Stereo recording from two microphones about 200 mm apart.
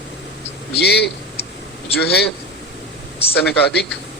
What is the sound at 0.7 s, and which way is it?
Mantra, 55° left (ahead or behind).